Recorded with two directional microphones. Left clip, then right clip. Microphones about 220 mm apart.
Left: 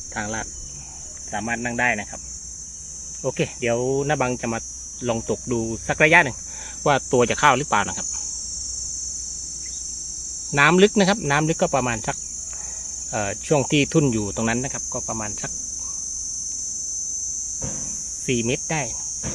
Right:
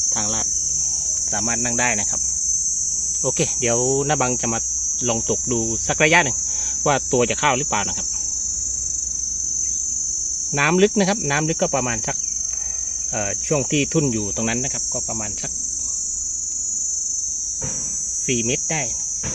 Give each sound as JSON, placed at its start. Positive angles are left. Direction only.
{"t": 1.5, "sound": "speech", "side_deg": -15}
{"t": 3.2, "sound": "speech", "side_deg": -15}
{"t": 6.8, "sound": "speech", "side_deg": 0}
{"t": 10.6, "sound": "speech", "side_deg": 0}
{"t": 13.5, "sound": "speech", "side_deg": 0}